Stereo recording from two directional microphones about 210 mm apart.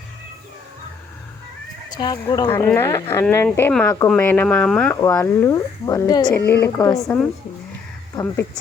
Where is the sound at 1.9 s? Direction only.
20° left (ahead or behind).